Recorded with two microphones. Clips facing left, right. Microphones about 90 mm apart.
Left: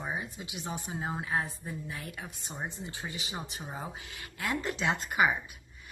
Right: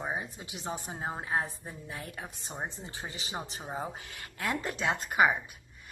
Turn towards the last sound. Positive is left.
turn(degrees=-40)  # may be behind; listen again after turning